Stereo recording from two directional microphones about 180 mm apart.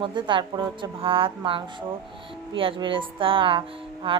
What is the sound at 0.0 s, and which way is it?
Speech, 25° right (ahead or behind).